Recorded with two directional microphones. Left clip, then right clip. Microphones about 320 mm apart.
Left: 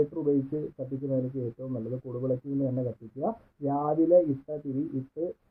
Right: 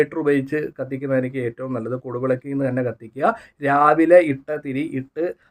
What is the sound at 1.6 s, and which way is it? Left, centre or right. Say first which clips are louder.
Speech: right 9 dB; right.